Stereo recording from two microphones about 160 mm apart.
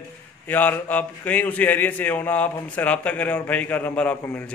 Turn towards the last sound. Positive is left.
turn(degrees=10)  # may be behind; listen again after turning